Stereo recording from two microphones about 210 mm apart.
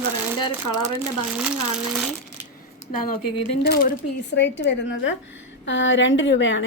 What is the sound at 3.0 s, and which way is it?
A woman's voice, 50° left (ahead or behind).